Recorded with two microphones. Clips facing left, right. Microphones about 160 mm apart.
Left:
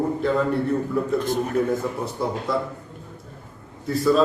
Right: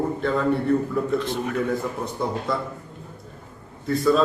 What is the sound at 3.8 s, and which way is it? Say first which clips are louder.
Speech: left 1 dB; centre (ahead or behind).